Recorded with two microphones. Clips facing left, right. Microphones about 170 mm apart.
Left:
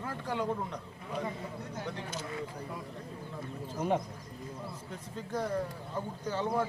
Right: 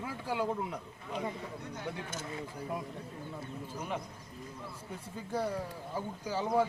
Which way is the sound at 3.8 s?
30° left (ahead or behind).